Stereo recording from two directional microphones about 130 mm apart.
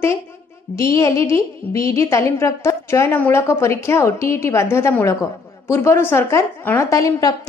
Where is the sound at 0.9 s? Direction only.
25° left (ahead or behind).